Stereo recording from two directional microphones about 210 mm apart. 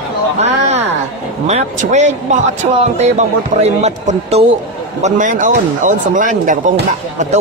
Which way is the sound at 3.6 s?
30° right (ahead or behind).